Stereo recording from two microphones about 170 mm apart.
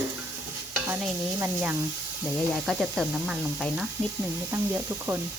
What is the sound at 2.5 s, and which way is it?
Speech, centre (ahead or behind).